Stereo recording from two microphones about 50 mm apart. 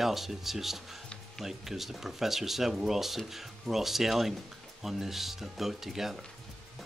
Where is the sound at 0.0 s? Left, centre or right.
Centre.